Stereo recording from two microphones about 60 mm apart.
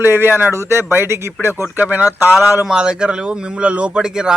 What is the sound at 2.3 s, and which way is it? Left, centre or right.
A man's voice, centre.